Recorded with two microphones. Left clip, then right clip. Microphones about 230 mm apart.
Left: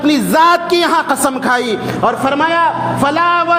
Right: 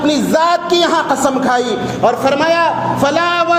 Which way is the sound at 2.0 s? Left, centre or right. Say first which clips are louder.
Right 1 dB; left.